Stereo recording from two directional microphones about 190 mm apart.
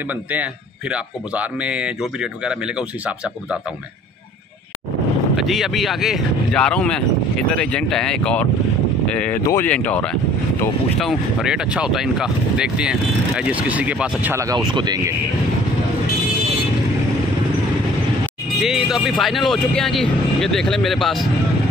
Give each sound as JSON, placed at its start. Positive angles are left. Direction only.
{"t": 0.3, "sound": "speech", "side_deg": -5}
{"t": 5.3, "sound": "speech", "side_deg": 0}
{"t": 18.6, "sound": "speech", "side_deg": 0}